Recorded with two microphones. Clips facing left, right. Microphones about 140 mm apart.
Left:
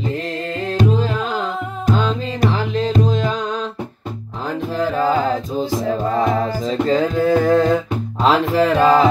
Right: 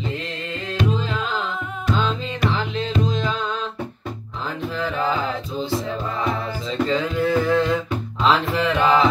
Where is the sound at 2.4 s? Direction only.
40° left (ahead or behind).